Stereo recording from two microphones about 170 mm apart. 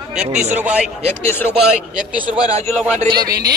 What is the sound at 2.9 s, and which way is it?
Speech, 25° right (ahead or behind).